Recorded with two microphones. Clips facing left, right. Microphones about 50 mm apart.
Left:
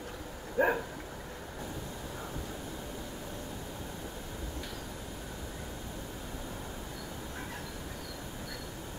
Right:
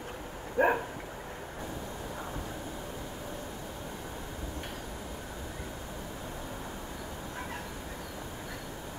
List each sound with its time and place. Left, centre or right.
0.6 s bow-wow: right